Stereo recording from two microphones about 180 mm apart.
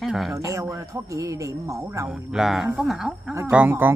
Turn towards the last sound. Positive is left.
turn(degrees=-10)  # may be behind; listen again after turning